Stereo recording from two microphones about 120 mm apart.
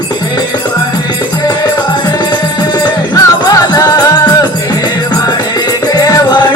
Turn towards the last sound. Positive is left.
turn(degrees=30)  # may be behind; listen again after turning